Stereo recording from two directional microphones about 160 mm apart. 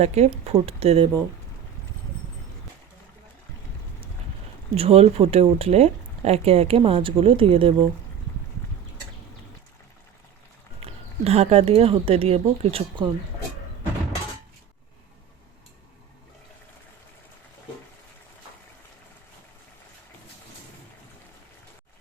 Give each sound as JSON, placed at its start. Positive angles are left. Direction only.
{"t": 0.0, "sound": "speech", "side_deg": -40}
{"t": 4.7, "sound": "speech", "side_deg": -40}
{"t": 10.8, "sound": "speech", "side_deg": -40}